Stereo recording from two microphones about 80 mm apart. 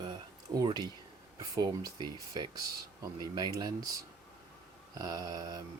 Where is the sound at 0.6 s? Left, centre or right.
Right.